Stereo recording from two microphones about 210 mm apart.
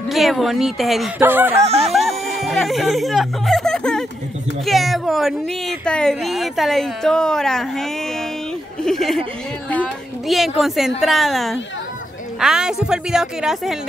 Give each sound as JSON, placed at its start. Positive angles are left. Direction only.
{"t": 0.1, "sound": "speech", "side_deg": 0}
{"t": 1.6, "sound": "music", "side_deg": -30}
{"t": 2.0, "sound": "speech", "side_deg": 0}